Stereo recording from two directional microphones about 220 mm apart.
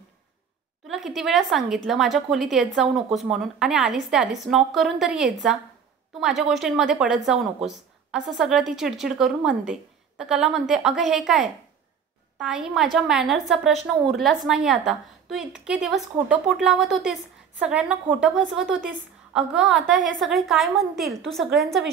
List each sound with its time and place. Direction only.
0.8 s a woman's voice: centre (ahead or behind)